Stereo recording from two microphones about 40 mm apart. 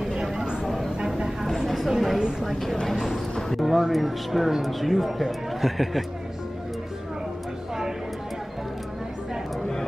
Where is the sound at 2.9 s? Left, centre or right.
Centre.